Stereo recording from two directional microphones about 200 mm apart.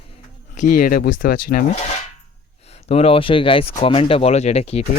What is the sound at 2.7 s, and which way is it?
Speech, 30° left (ahead or behind).